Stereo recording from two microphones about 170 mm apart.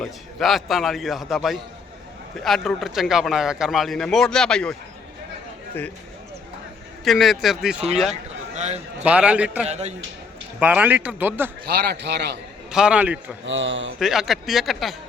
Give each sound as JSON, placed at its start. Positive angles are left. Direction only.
{"t": 0.0, "sound": "a man's voice", "side_deg": 0}
{"t": 7.0, "sound": "a man's voice", "side_deg": 0}
{"t": 8.5, "sound": "a man's voice", "side_deg": -40}
{"t": 9.0, "sound": "speech", "side_deg": -5}
{"t": 9.6, "sound": "a man's voice", "side_deg": -40}
{"t": 10.6, "sound": "speech", "side_deg": -10}
{"t": 11.6, "sound": "a man's voice", "side_deg": -70}
{"t": 12.7, "sound": "speech", "side_deg": -5}
{"t": 13.4, "sound": "a man's voice", "side_deg": -90}
{"t": 14.0, "sound": "a man's voice", "side_deg": 0}